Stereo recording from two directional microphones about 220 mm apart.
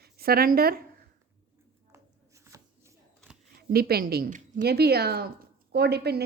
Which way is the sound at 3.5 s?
45° right (ahead or behind).